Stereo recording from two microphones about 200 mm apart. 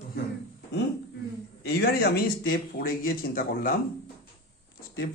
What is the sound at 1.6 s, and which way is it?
Speech, 50° left (ahead or behind).